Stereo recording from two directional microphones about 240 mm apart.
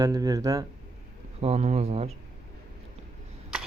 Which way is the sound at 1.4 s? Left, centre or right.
Right.